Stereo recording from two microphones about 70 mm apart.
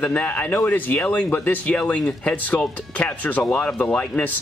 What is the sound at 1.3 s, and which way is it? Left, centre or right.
Speech, left.